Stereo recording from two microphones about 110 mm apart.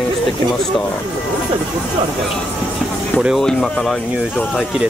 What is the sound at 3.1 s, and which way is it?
Speech, centre (ahead or behind).